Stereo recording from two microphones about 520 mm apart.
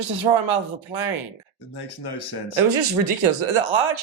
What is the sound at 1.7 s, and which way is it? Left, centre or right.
Speech, left.